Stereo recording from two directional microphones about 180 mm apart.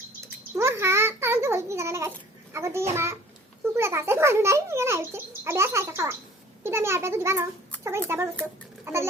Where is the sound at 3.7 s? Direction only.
15° right (ahead or behind).